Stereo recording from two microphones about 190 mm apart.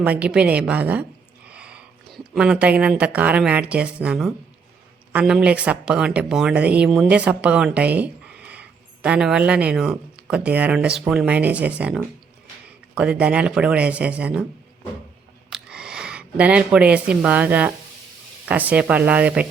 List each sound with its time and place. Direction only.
0.0 s speech: 5° right (ahead or behind)
15.4 s speech: 5° right (ahead or behind)